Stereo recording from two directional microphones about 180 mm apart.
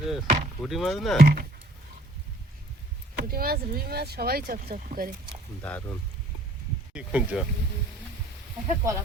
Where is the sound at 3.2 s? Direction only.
55° right (ahead or behind).